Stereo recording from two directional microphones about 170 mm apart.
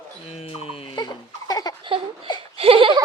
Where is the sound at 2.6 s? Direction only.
30° right (ahead or behind).